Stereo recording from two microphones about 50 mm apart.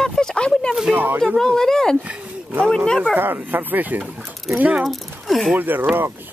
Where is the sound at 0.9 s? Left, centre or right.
Right.